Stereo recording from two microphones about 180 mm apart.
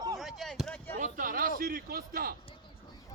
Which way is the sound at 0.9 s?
50° right (ahead or behind).